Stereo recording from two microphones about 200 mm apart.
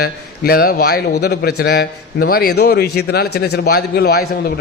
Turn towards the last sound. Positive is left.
turn(degrees=50)  # may be behind; listen again after turning